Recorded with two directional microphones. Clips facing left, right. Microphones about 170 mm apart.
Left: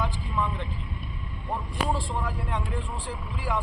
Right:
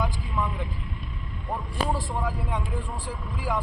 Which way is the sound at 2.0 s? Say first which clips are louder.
Right 1 dB; 15° right (ahead or behind).